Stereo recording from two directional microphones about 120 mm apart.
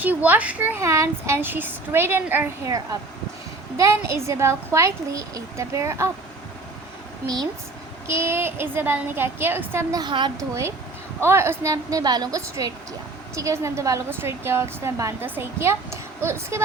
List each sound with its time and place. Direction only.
0.0 s speech: 15° right (ahead or behind)
8.0 s speech: 20° right (ahead or behind)
9.9 s a woman's voice: 40° right (ahead or behind)
10.5 s speech: 25° right (ahead or behind)